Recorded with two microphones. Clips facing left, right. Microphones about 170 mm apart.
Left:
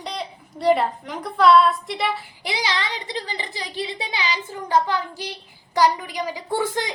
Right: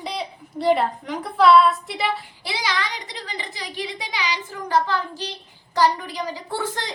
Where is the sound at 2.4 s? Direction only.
20° left (ahead or behind).